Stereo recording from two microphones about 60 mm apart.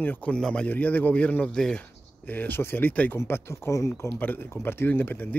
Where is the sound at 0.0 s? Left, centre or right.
Left.